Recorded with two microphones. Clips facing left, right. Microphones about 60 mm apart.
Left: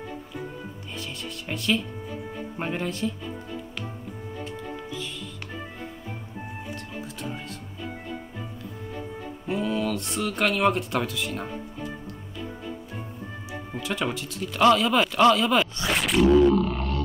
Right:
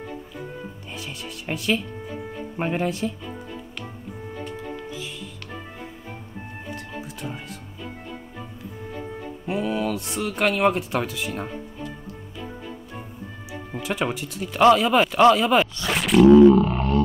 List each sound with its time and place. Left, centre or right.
0.9 s speech: centre
9.5 s speech: centre
13.8 s speech: centre
15.9 s roaring cats: centre
16.5 s a sound: right